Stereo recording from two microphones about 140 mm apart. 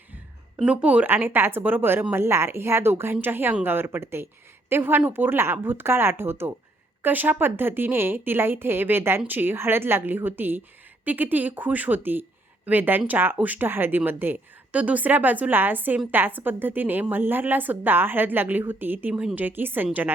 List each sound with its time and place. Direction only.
0.6 s a woman's voice: 10° right (ahead or behind)